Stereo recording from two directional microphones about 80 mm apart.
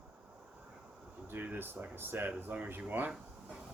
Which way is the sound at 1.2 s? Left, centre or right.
Right.